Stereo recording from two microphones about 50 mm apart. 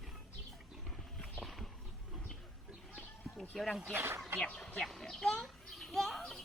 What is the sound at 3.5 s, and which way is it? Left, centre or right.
Speech, centre.